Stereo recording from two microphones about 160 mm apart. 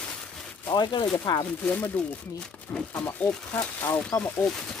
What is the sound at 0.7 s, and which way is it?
Speech, 30° left (ahead or behind).